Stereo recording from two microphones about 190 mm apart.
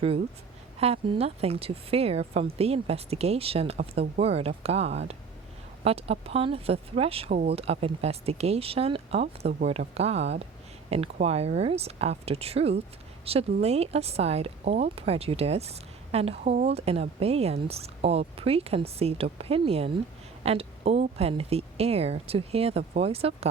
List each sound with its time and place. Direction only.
0.8 s speech: 30° right (ahead or behind)